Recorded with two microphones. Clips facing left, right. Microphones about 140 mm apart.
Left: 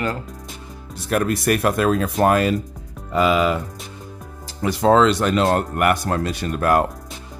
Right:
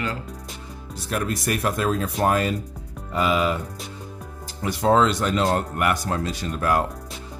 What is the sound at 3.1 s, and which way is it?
Speech, 90° left.